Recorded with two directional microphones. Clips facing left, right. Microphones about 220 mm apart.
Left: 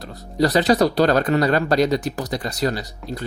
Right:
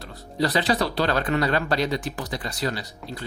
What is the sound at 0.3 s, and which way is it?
Speech, 40° left (ahead or behind).